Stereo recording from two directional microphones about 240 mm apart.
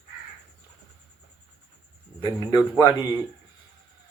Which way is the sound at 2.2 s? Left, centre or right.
Centre.